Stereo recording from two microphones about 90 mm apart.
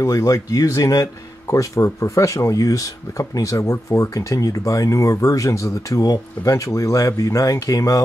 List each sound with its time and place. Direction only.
0.0 s a man's voice: 40° left (ahead or behind)